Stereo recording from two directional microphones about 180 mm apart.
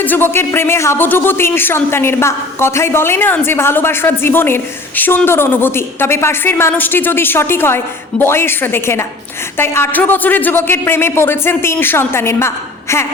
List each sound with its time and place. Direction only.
0.0 s a man's voice: 10° left (ahead or behind)